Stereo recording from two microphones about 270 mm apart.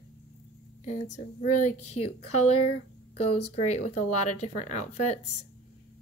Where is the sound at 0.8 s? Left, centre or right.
Left.